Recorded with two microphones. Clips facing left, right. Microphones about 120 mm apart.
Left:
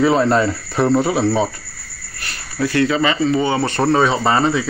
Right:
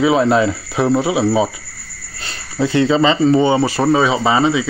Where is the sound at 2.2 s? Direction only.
20° right (ahead or behind).